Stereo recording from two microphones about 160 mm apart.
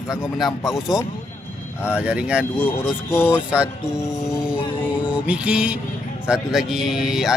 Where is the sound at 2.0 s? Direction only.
5° right (ahead or behind).